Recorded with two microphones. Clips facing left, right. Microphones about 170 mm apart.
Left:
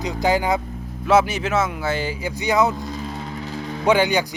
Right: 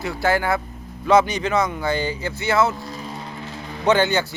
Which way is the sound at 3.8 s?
10° left (ahead or behind).